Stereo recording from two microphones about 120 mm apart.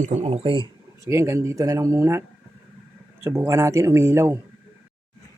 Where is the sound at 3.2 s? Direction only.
25° right (ahead or behind).